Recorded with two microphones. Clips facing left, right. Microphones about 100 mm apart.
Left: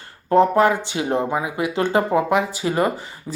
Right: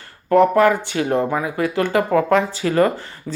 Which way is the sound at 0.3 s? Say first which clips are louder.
Right 2 dB; 25° left (ahead or behind).